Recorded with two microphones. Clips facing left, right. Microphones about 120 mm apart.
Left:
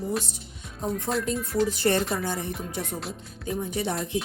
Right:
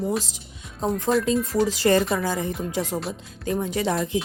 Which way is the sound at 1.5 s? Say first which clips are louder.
Right 2 dB; 90° right.